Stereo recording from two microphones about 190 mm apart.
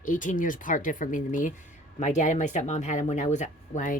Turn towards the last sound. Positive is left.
turn(degrees=40)  # may be behind; listen again after turning